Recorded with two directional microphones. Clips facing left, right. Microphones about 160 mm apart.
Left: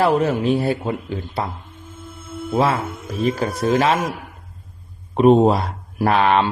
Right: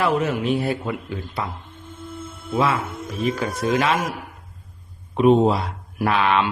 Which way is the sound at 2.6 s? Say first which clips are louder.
Left 2 dB; 40° left (ahead or behind).